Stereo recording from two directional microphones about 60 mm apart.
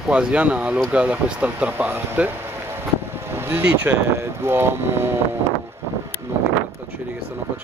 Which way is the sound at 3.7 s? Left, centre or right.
Right.